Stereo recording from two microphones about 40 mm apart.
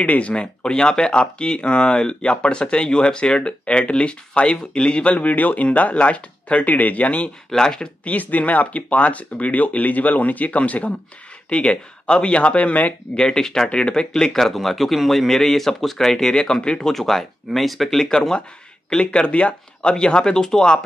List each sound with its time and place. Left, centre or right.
0.0 s speech: left
5.1 s speech: left
7.5 s a man's voice: centre
8.0 s speech: left
13.1 s speech: left
13.7 s a man's voice: left; by 16.1 s centre
16.1 s a man's voice: centre
18.9 s speech: left